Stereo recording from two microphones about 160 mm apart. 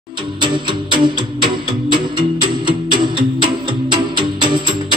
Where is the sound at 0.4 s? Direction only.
30° right (ahead or behind).